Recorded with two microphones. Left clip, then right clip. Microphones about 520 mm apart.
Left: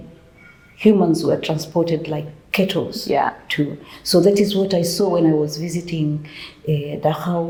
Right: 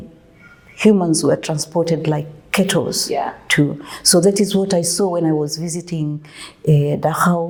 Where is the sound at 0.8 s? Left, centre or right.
Right.